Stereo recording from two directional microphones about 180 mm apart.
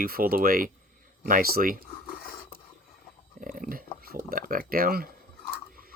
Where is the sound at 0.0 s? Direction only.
55° right (ahead or behind).